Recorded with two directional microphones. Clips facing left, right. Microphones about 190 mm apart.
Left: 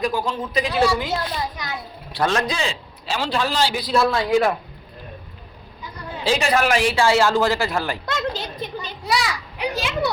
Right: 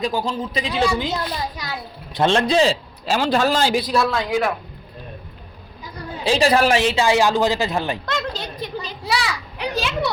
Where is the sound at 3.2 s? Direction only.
45° right (ahead or behind).